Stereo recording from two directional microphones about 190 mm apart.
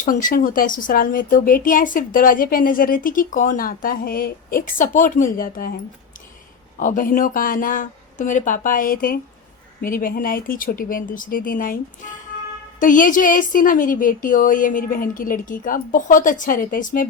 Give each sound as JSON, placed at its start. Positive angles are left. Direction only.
{"t": 0.0, "sound": "speech", "side_deg": 45}
{"t": 12.8, "sound": "speech", "side_deg": 45}